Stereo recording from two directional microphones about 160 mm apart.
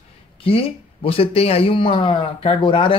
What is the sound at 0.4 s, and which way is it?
A man's voice, 35° left (ahead or behind).